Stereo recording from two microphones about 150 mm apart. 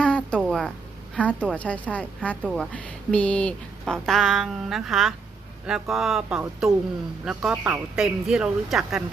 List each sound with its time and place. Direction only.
0.0 s a sound: 5° left (ahead or behind)
1.1 s a woman's voice: 10° left (ahead or behind); by 8.0 s 15° right (ahead or behind)
8.0 s speech: 5° right (ahead or behind)